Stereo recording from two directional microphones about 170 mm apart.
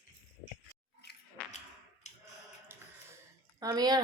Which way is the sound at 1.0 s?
75° left (ahead or behind).